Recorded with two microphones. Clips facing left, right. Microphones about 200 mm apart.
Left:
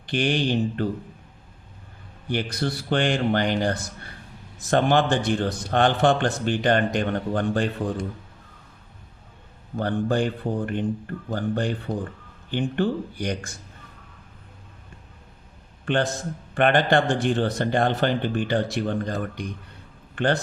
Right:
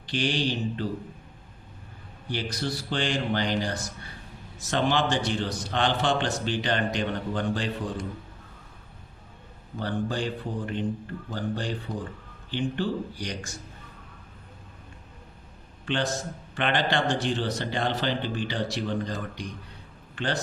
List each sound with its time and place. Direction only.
0.0 s speech: 55° left (ahead or behind)
2.3 s a man's voice: 60° left (ahead or behind)
9.7 s speech: 55° left (ahead or behind)
15.9 s a man's voice: 55° left (ahead or behind)